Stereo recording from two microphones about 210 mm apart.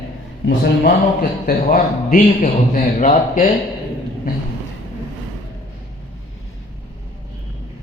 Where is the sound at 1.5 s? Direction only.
45° left (ahead or behind).